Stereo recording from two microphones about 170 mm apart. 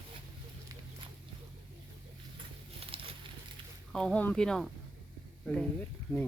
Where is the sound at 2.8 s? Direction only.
35° right (ahead or behind).